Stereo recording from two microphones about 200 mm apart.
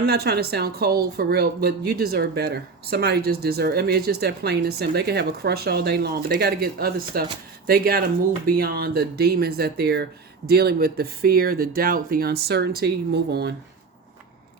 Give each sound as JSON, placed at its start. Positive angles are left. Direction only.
{"t": 0.0, "sound": "a woman's voice", "side_deg": -55}